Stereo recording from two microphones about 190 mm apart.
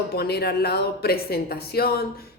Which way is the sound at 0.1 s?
55° left (ahead or behind).